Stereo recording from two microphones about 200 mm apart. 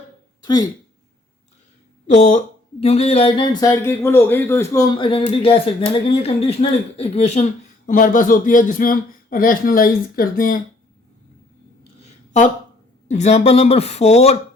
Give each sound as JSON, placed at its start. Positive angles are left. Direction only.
{"t": 2.0, "sound": "a man's voice", "side_deg": 40}
{"t": 13.1, "sound": "a man's voice", "side_deg": 35}